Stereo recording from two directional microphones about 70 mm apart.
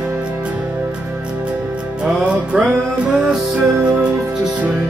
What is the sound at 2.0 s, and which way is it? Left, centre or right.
Music, centre.